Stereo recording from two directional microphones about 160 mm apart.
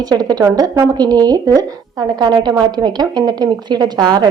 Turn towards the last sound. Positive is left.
turn(degrees=-25)  # may be behind; listen again after turning